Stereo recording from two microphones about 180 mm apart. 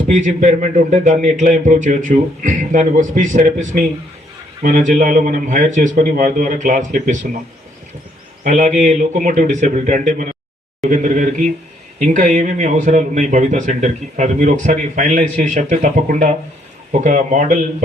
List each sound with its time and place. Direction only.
0.1 s speech: 45° right (ahead or behind)
8.4 s speech: 40° right (ahead or behind)